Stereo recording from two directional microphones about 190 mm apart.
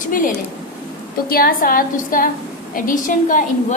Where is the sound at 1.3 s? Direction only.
50° left (ahead or behind).